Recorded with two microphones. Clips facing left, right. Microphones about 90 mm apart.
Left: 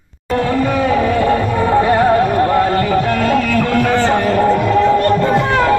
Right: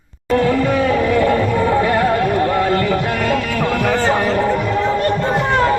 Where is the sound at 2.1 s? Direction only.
35° left (ahead or behind).